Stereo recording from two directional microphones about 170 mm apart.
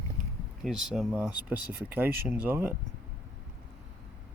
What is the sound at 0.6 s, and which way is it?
Speech, centre (ahead or behind).